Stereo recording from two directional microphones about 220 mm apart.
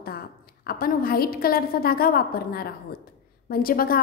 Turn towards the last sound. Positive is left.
turn(degrees=40)  # may be behind; listen again after turning